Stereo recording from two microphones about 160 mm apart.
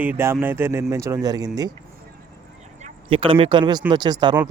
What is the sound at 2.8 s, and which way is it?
Speech, 35° right (ahead or behind).